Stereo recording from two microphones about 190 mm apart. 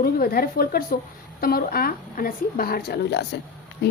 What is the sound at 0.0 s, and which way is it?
Speech, 50° left (ahead or behind).